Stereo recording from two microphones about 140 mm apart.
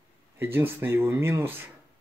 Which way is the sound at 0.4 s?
15° right (ahead or behind).